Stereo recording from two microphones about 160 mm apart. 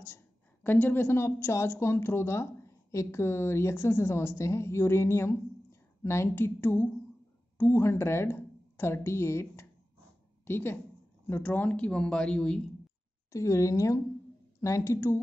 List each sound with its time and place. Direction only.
0.7 s a woman's voice: 15° left (ahead or behind)
13.3 s speech: 20° left (ahead or behind)